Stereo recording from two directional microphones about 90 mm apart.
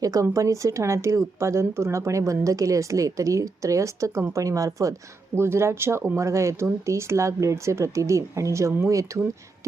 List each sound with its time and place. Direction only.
0.0 s a woman's voice: 40° right (ahead or behind)